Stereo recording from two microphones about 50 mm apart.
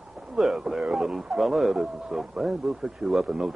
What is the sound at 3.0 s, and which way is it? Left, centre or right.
Speech, right.